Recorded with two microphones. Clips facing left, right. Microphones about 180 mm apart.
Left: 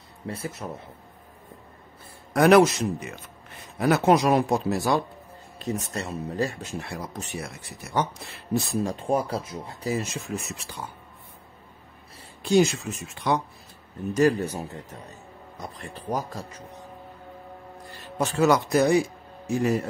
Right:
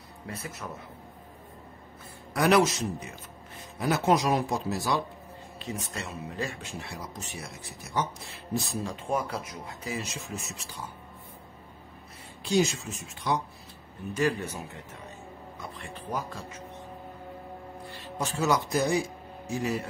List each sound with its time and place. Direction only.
0.3 s a man's voice: 30° left (ahead or behind)
2.3 s a man's voice: 50° left (ahead or behind)
5.6 s speech: 40° left (ahead or behind)
6.8 s speech: 55° left (ahead or behind)
8.8 s speech: 35° left (ahead or behind)
9.9 s a man's voice: 50° left (ahead or behind)
12.4 s speech: 55° left (ahead or behind)
14.1 s speech: 40° left (ahead or behind)
18.1 s speech: 65° left (ahead or behind)